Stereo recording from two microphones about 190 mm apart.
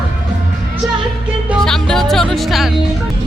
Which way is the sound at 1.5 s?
Centre (ahead or behind).